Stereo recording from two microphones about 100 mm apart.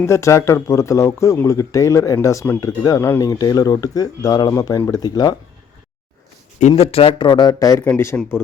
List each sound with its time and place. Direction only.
0.0 s speech: 30° left (ahead or behind)
6.7 s speech: 80° left; by 7.9 s 35° left (ahead or behind)
7.9 s speech: 25° left (ahead or behind)